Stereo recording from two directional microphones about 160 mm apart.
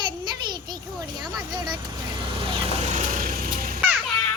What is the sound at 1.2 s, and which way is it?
Speech, 25° right (ahead or behind).